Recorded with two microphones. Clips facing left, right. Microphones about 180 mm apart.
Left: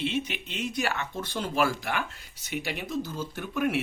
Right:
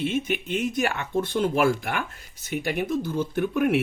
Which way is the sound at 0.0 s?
50° right (ahead or behind).